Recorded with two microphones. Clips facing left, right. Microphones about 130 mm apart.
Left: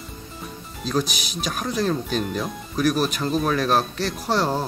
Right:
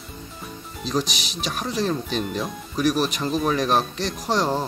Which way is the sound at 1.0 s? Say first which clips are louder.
Left 1 dB; 45° left (ahead or behind).